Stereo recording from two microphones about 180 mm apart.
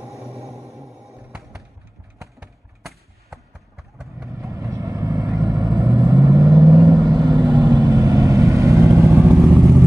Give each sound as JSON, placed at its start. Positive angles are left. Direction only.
{"t": 0.2, "sound": "music", "side_deg": 0}
{"t": 2.8, "sound": "vehicle", "side_deg": 0}
{"t": 4.3, "sound": "vehicle", "side_deg": -15}